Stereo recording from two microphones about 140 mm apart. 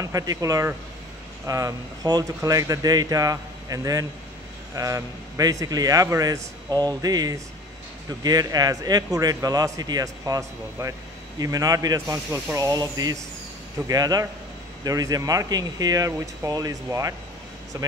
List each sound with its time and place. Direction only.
0.0 s a man's voice: 25° right (ahead or behind)